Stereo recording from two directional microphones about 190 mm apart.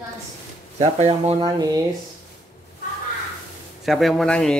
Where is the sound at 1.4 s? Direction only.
20° right (ahead or behind).